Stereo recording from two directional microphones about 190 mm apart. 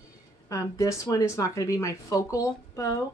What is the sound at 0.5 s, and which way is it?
Speech, 15° left (ahead or behind).